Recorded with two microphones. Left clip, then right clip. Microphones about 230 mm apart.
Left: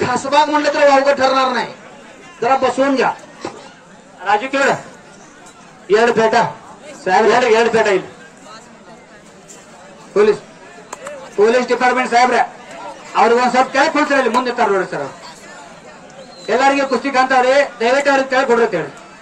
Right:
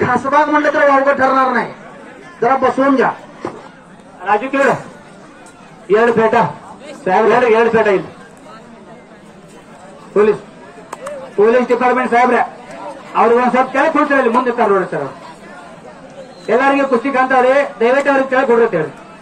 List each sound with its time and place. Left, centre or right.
0.0 s a man's voice: left
4.2 s a man's voice: left
5.9 s a man's voice: left
11.3 s a man's voice: left
16.4 s speech: left
17.1 s a man's voice: left
18.4 s speech: left